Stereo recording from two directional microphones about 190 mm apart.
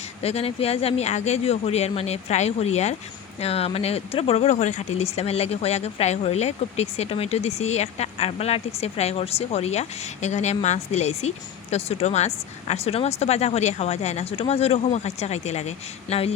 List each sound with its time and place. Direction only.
0.2 s speech: 30° left (ahead or behind)